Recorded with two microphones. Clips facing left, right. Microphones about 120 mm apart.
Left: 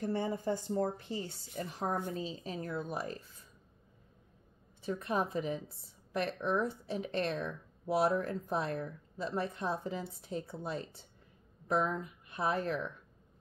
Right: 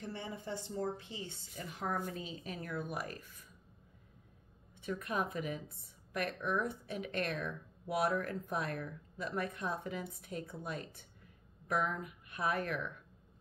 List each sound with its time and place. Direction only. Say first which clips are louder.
0.0 s a woman's voice: left 9 dB; 45° left (ahead or behind); by 3.4 s 25° left (ahead or behind)
4.8 s a woman's voice: left 3 dB; 30° left (ahead or behind)